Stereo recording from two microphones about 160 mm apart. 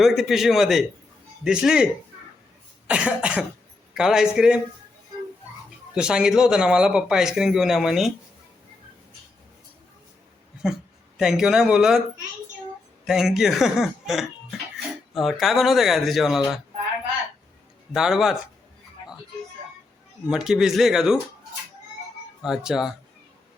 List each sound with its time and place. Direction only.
0.0 s speech: centre (ahead or behind)
2.9 s cough: 5° right (ahead or behind)
3.9 s speech: 5° right (ahead or behind)
5.9 s speech: 5° right (ahead or behind)
11.2 s speech: 5° right (ahead or behind)
13.1 s speech: 5° right (ahead or behind)
17.9 s speech: 5° right (ahead or behind)
20.3 s speech: 5° right (ahead or behind)
22.4 s speech: 5° right (ahead or behind)